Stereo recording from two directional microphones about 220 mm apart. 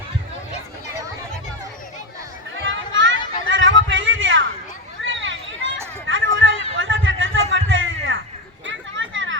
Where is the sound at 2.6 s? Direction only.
60° right (ahead or behind).